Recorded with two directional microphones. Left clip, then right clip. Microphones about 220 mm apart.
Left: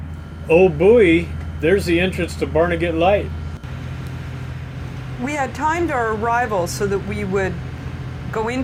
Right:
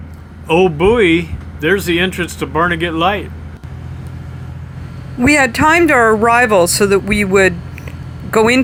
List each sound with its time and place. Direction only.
0.6 s speech: 50° right (ahead or behind)
5.2 s speech: 55° right (ahead or behind)